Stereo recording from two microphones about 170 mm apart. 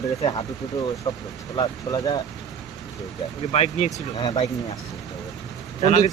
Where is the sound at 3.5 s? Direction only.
40° left (ahead or behind).